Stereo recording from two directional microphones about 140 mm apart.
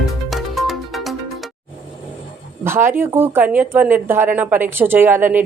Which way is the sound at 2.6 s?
15° right (ahead or behind).